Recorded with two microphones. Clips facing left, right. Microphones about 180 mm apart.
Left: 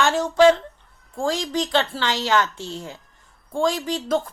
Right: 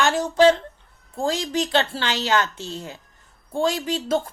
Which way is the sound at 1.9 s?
25° right (ahead or behind).